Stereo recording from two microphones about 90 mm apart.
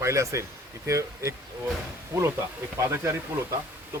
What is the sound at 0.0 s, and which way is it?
A man's voice, 35° right (ahead or behind).